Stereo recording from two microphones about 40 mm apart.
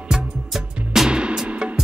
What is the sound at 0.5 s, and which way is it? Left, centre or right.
Music, centre.